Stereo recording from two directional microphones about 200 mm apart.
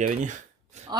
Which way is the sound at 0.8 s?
35° right (ahead or behind).